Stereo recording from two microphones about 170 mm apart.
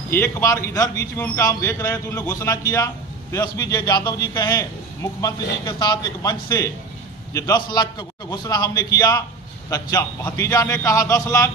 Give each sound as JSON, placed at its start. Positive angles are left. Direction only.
{"t": 0.1, "sound": "a man's voice", "side_deg": 15}